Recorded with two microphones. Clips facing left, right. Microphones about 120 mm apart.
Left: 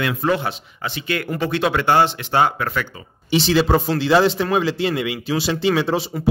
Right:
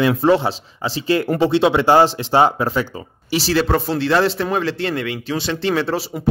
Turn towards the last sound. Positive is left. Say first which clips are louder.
# left 1 dB
turn(degrees=0)  # may be behind; listen again after turning